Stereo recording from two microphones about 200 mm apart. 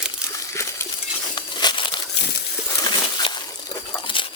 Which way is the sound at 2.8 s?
20° left (ahead or behind).